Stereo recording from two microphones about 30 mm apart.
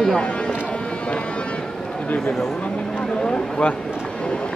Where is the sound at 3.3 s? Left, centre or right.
Left.